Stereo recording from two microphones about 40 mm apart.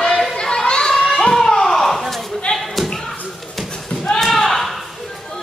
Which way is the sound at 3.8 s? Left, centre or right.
Centre.